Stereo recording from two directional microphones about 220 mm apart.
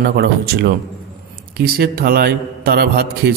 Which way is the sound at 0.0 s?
45° right (ahead or behind).